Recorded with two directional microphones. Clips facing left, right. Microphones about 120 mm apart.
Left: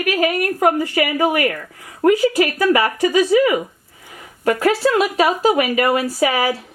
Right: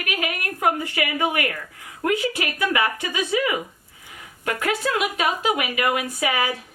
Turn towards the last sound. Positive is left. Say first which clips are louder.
# left 6 dB
turn(degrees=35)  # may be behind; listen again after turning